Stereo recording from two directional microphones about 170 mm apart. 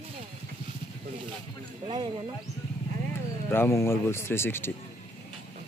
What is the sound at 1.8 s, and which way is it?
Speech, 30° right (ahead or behind).